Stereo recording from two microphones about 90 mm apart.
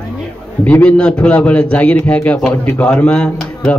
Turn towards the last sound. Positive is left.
turn(degrees=10)  # may be behind; listen again after turning